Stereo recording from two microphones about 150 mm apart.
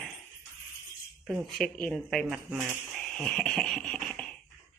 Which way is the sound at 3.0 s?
Centre (ahead or behind).